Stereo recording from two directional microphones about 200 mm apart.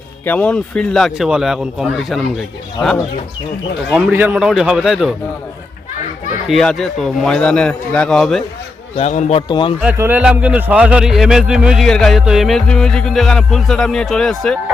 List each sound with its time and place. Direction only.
0.3 s a man's voice: 5° left (ahead or behind)
4.1 s a man's voice: 10° right (ahead or behind)
6.5 s a man's voice: centre (ahead or behind)
9.0 s speech: 35° left (ahead or behind)
9.5 s speech: 25° left (ahead or behind)
9.8 s a man's voice: 10° right (ahead or behind)